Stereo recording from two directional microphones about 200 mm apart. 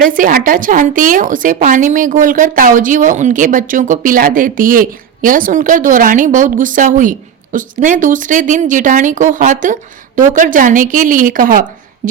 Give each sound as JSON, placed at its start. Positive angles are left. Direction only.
{"t": 0.0, "sound": "a woman's voice", "side_deg": -40}